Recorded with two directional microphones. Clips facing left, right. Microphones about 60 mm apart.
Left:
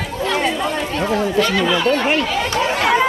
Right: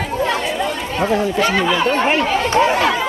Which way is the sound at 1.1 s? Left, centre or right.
Right.